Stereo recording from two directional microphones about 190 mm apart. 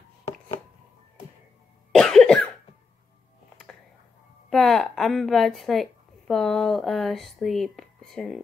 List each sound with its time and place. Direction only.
1.9 s cough: centre (ahead or behind)
4.5 s a woman's voice: centre (ahead or behind)